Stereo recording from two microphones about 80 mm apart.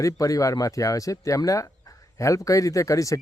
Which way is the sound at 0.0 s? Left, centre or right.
Left.